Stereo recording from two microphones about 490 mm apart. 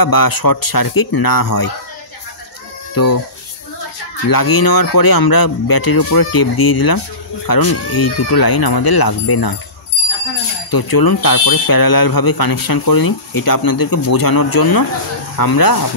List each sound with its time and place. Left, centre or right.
0.0 s speech: left
2.9 s speech: left
4.3 s speech: left
10.7 s speech: left